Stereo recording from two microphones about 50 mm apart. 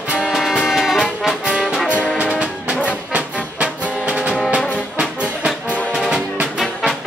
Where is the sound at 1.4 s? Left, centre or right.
Centre.